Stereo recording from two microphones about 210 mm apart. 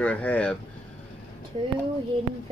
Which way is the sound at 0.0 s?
5° left (ahead or behind).